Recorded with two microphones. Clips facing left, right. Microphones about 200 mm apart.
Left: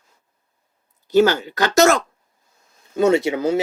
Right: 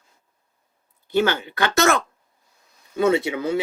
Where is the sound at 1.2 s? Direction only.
40° left (ahead or behind).